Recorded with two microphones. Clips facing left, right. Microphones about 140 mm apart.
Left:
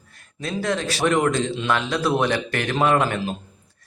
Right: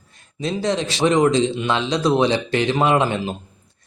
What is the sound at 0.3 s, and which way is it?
Speech, 20° right (ahead or behind).